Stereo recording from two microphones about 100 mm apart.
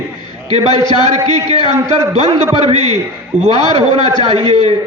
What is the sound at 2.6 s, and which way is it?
Speech, 90° right.